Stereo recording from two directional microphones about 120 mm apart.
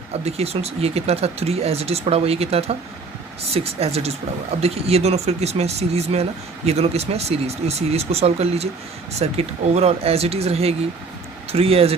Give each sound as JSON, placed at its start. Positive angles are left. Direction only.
{"t": 0.3, "sound": "speech", "side_deg": -60}